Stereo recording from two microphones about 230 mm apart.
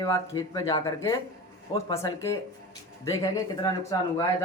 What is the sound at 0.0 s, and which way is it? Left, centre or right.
Speech, centre.